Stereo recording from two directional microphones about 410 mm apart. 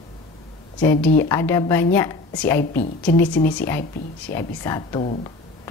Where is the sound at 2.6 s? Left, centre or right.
Left.